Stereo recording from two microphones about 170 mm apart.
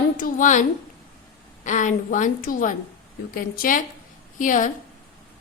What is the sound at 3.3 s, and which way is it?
Speech, 55° left (ahead or behind).